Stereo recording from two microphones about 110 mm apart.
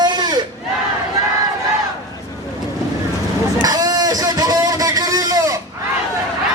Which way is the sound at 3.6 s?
35° right (ahead or behind).